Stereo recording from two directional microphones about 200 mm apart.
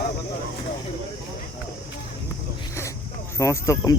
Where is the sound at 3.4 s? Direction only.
15° left (ahead or behind).